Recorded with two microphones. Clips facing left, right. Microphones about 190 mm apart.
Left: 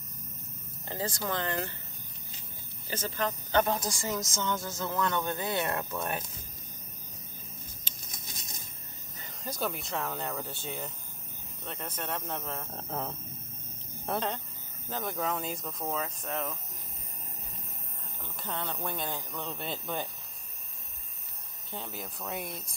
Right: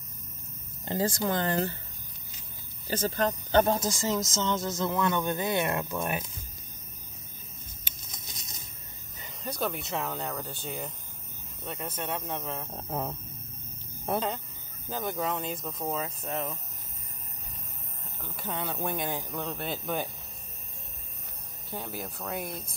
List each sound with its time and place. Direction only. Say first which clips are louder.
0.8 s speech: right 6 dB; 30° right (ahead or behind)
2.9 s a woman's voice: right 5 dB; 35° right (ahead or behind); by 6.2 s 10° right (ahead or behind)
9.4 s speech: right 2 dB; centre (ahead or behind)
14.9 s speech: right 2 dB; 5° right (ahead or behind)
18.2 s a woman's voice: right 2 dB; 10° right (ahead or behind)
19.5 s speech: right 3 dB; 5° right (ahead or behind)
21.7 s speech: right 3 dB; 5° right (ahead or behind)